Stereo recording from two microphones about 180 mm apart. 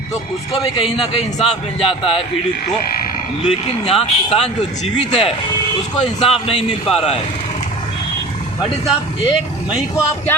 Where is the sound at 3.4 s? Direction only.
30° left (ahead or behind).